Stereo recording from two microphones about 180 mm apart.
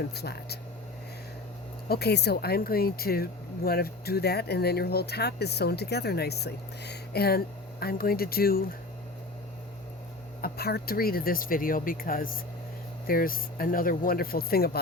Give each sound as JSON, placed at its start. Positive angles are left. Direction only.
{"t": 0.0, "sound": "speech", "side_deg": 65}
{"t": 1.9, "sound": "speech", "side_deg": 65}
{"t": 10.4, "sound": "speech", "side_deg": 60}